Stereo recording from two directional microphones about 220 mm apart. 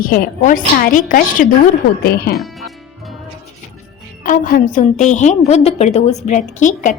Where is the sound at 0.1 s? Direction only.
40° left (ahead or behind).